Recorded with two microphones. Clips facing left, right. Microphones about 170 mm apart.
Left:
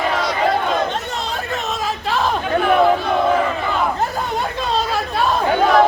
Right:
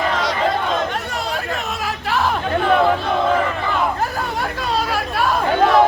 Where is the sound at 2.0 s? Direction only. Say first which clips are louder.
Even; 20° left (ahead or behind).